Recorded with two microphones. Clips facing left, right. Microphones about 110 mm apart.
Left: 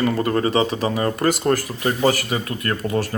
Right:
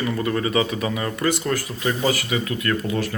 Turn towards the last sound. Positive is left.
turn(degrees=35)  # may be behind; listen again after turning